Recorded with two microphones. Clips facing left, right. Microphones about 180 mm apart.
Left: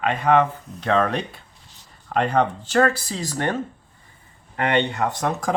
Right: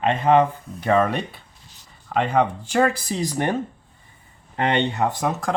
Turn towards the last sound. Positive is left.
turn(degrees=-5)  # may be behind; listen again after turning